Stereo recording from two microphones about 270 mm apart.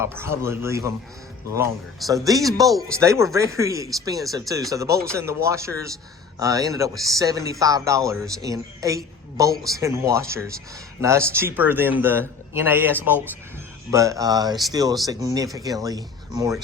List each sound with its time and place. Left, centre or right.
0.0 s a woman's voice: centre
2.0 s a woman's voice: centre